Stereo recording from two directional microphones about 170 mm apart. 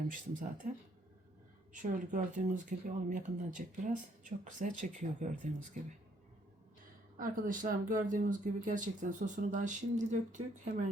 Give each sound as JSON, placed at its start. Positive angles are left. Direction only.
{"t": 0.1, "sound": "speech", "side_deg": -50}
{"t": 1.7, "sound": "speech", "side_deg": -50}
{"t": 7.2, "sound": "speech", "side_deg": -50}